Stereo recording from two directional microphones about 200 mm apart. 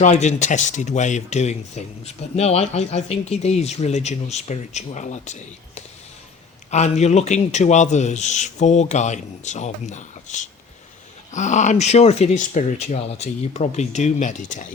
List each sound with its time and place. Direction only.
0.0 s speech: 35° left (ahead or behind)